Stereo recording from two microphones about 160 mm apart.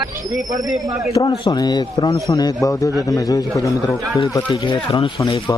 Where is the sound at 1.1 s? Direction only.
20° left (ahead or behind).